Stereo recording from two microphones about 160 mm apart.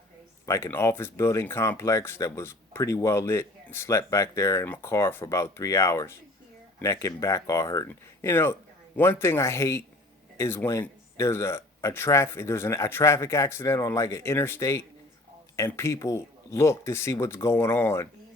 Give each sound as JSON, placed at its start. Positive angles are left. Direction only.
{"t": 0.4, "sound": "speech", "side_deg": 15}